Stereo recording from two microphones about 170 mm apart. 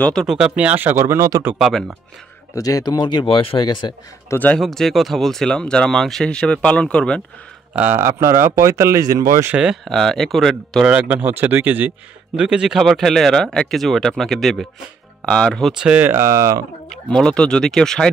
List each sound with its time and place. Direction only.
0.0 s speech: centre (ahead or behind)
2.5 s speech: 20° left (ahead or behind)
4.4 s speech: 5° left (ahead or behind)
7.7 s speech: 10° right (ahead or behind)
16.9 s speech: 5° left (ahead or behind)